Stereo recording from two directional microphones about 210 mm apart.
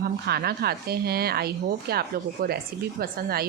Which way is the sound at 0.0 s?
50° right (ahead or behind).